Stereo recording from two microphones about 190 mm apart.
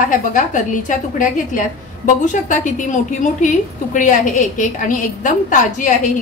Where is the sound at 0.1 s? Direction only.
45° left (ahead or behind).